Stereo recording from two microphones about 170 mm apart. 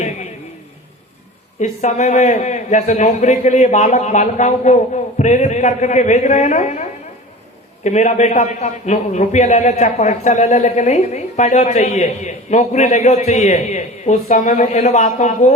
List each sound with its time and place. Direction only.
1.5 s a man's voice: 45° left (ahead or behind)
7.9 s a man's voice: 45° left (ahead or behind)